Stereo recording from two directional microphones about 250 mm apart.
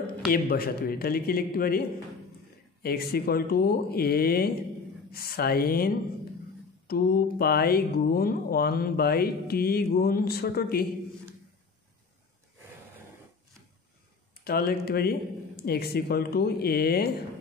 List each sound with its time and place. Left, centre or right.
0.0 s speech: left
14.3 s speech: left